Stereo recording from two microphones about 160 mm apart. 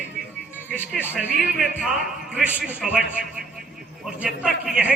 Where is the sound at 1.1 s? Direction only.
5° right (ahead or behind).